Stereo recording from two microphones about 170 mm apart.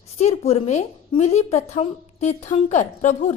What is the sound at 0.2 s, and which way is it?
Speech, 40° left (ahead or behind).